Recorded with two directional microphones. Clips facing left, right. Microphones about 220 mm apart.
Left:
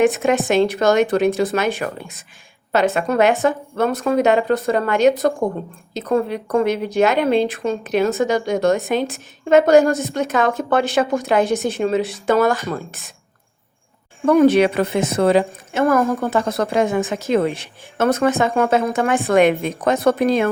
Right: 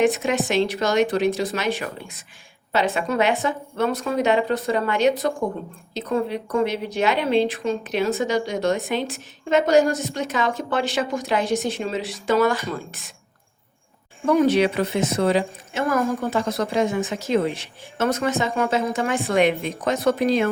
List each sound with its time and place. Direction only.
0.0 s a woman's voice: 50° left (ahead or behind)
14.3 s a woman's voice: 55° left (ahead or behind)